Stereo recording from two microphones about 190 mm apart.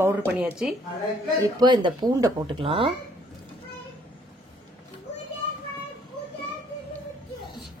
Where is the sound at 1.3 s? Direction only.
20° right (ahead or behind).